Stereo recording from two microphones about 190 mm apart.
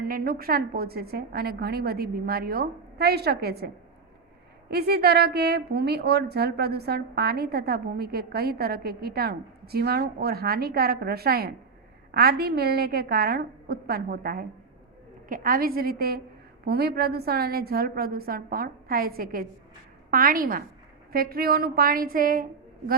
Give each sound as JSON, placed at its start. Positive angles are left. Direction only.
{"t": 0.1, "sound": "a woman's voice", "side_deg": -50}
{"t": 4.7, "sound": "a woman's voice", "side_deg": -55}